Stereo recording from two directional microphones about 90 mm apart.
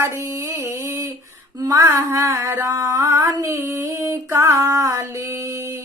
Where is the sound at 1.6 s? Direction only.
35° right (ahead or behind).